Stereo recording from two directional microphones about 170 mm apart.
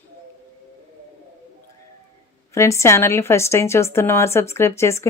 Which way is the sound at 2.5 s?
15° left (ahead or behind).